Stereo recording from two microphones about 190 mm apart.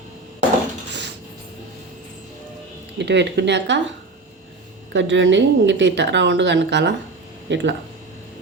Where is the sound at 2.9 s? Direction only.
65° right (ahead or behind).